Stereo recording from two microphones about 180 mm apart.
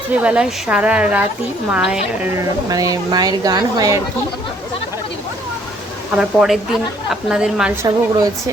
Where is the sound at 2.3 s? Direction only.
20° right (ahead or behind).